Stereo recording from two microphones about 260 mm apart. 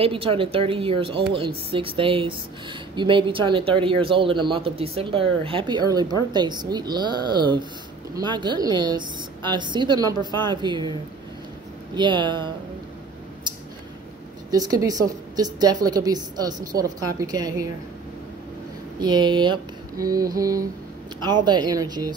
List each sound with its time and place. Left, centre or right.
0.0 s a woman's voice: right
11.9 s a woman's voice: centre
14.5 s a woman's voice: centre
18.9 s a woman's voice: centre